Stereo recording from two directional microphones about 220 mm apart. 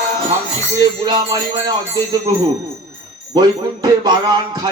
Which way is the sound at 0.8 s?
20° right (ahead or behind).